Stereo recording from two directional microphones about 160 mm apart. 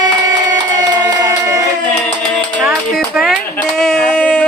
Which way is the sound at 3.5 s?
5° left (ahead or behind).